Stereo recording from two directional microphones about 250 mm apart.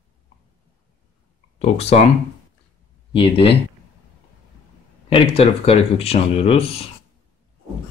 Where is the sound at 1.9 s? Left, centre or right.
Left.